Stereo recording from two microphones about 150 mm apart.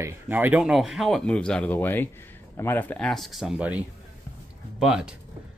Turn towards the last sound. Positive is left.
turn(degrees=-5)  # may be behind; listen again after turning